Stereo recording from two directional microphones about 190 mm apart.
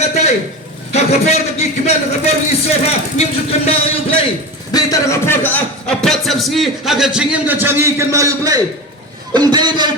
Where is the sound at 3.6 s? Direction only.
30° left (ahead or behind).